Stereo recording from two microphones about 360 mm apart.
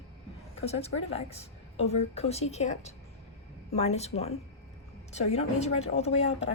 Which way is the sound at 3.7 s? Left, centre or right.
Centre.